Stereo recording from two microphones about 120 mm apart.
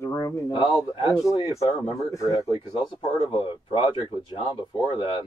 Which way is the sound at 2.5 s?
40° left (ahead or behind).